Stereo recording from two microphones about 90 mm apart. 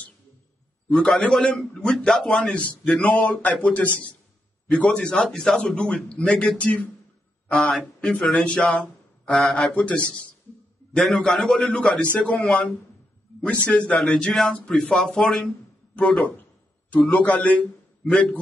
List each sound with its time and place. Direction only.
0.8 s a man's voice: 5° left (ahead or behind)
17.1 s a man's voice: 15° left (ahead or behind)